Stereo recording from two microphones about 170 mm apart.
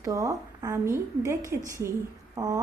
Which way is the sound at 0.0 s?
20° right (ahead or behind).